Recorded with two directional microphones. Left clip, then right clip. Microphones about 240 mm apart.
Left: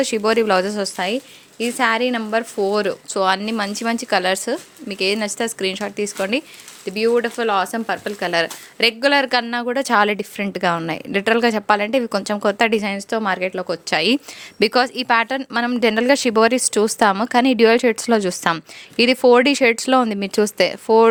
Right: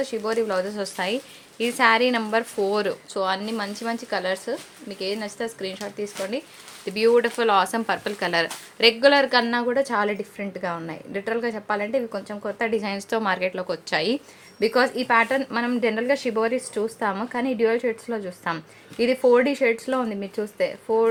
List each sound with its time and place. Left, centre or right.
0.0 s speech: left
6.8 s a woman's voice: centre; by 21.1 s left